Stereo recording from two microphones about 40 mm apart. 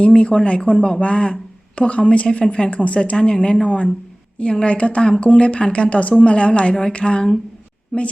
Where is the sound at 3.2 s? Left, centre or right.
Left.